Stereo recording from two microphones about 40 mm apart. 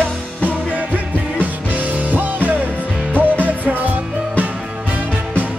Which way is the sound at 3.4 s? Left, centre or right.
Right.